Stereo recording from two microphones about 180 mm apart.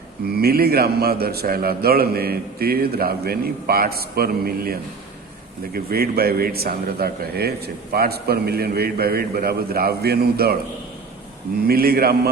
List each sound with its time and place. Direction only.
0.3 s speech: 60° right (ahead or behind)
11.7 s speech: 55° right (ahead or behind)